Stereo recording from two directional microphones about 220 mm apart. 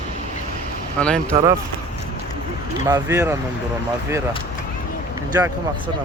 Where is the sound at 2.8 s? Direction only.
15° right (ahead or behind).